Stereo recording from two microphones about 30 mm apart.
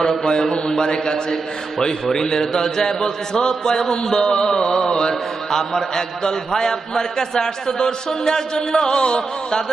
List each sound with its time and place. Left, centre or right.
0.0 s a man's voice: left